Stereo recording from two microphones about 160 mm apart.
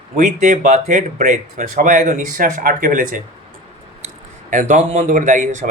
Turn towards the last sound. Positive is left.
turn(degrees=-50)  # may be behind; listen again after turning